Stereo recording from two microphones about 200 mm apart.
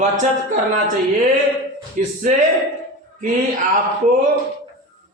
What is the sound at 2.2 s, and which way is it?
Speech, 40° right (ahead or behind).